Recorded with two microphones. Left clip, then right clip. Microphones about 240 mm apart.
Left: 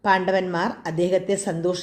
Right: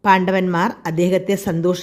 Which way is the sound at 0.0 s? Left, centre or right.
Right.